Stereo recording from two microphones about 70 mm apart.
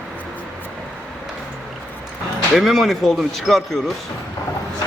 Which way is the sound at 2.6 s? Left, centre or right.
Centre.